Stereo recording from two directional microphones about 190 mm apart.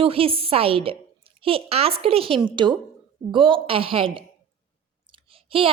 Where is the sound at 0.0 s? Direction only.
30° right (ahead or behind).